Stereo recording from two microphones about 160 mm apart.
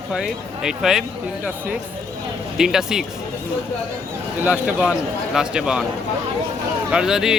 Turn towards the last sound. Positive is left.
turn(degrees=-5)  # may be behind; listen again after turning